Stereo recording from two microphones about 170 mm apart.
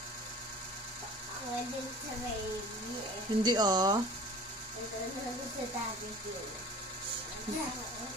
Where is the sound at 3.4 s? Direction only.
25° right (ahead or behind).